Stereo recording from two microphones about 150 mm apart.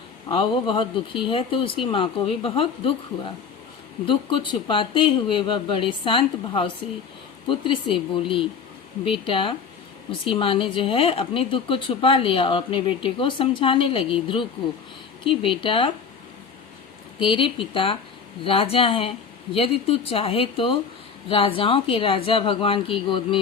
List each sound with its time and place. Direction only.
0.3 s speech: 35° left (ahead or behind)
17.2 s speech: 35° left (ahead or behind)